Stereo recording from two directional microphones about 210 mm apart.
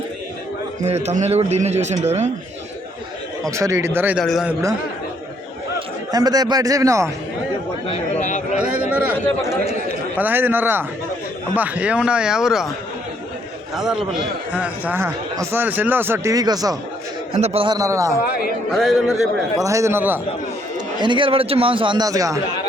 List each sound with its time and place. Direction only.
0.8 s a man's voice: 30° right (ahead or behind)
3.4 s a man's voice: 15° right (ahead or behind)
6.1 s a man's voice: 20° right (ahead or behind)
7.9 s a sound: 35° left (ahead or behind)
8.5 s a sound: 5° right (ahead or behind)
9.2 s speech: 15° left (ahead or behind)
10.2 s a man's voice: 10° right (ahead or behind)
13.7 s a man's voice: centre (ahead or behind); by 16.7 s 15° right (ahead or behind)
17.3 s a man's voice: 30° right (ahead or behind)
18.7 s speech: centre (ahead or behind)
19.5 s a man's voice: 15° right (ahead or behind)
21.0 s a man's voice: 25° right (ahead or behind)